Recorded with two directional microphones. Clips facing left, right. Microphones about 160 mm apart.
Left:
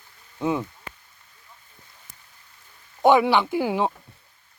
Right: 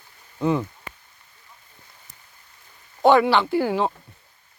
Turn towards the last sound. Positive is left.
turn(degrees=15)  # may be behind; listen again after turning